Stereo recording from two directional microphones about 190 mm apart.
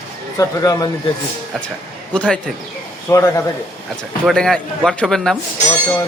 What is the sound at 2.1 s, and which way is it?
A man's voice, 5° left (ahead or behind).